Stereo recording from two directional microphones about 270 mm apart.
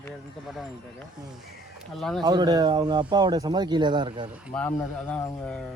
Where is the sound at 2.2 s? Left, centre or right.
Centre.